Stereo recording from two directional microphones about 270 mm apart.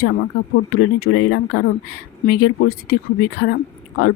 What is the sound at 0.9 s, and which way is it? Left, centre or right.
Speech, left.